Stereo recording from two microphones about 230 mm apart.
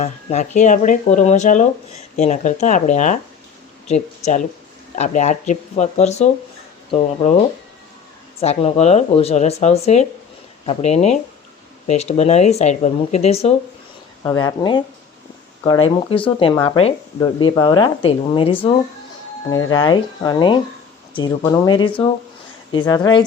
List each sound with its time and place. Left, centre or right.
0.0 s speech: left
8.4 s speech: left